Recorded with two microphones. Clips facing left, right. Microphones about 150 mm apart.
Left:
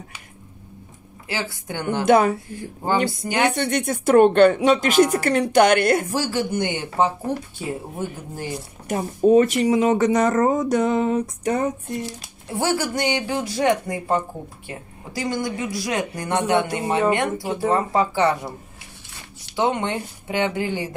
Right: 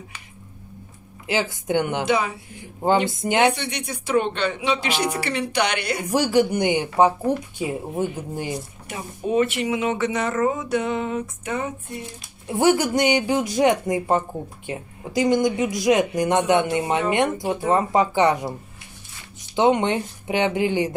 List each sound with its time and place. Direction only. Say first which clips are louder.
1.2 s speech: right 5 dB; 20° right (ahead or behind)
2.0 s speech: left 6 dB; 50° left (ahead or behind)
2.6 s speech: right 2 dB; 20° right (ahead or behind)
3.5 s speech: left 8 dB; 50° left (ahead or behind)
6.0 s speech: right 5 dB; 15° right (ahead or behind)
8.8 s speech: left 12 dB; 40° left (ahead or behind)
12.5 s speech: right 4 dB; 20° right (ahead or behind)
19.5 s speech: right 4 dB; 20° right (ahead or behind)